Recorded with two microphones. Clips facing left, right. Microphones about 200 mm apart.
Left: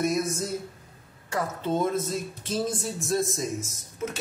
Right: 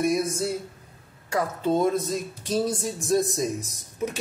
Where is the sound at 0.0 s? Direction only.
10° right (ahead or behind).